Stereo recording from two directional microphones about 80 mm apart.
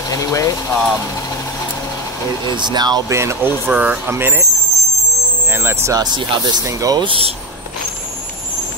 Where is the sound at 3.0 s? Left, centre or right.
Right.